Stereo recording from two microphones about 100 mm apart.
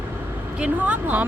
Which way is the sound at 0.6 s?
15° right (ahead or behind).